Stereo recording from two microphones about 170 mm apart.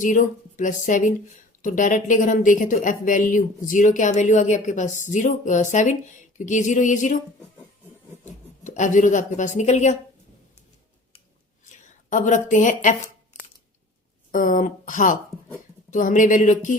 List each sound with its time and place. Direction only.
0.0 s speech: 50° left (ahead or behind)
8.2 s speech: 45° left (ahead or behind)
11.6 s a sound: 45° left (ahead or behind)
12.5 s speech: 50° left (ahead or behind)
14.3 s speech: 50° left (ahead or behind)